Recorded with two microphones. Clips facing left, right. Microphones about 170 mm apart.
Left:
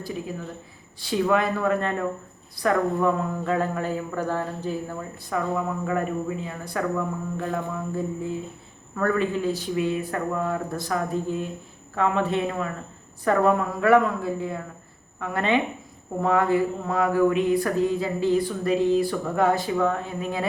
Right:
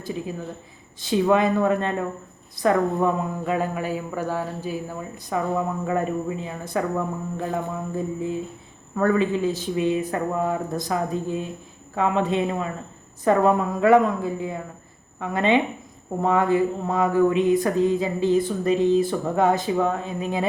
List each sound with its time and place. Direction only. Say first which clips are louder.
1.0 s speech: right 3 dB; 20° right (ahead or behind)
5.3 s speech: right 2 dB; 25° right (ahead or behind)